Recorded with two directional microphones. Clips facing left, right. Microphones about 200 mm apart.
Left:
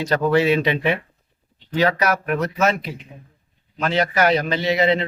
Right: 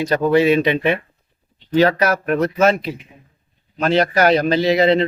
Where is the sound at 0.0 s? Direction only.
15° right (ahead or behind).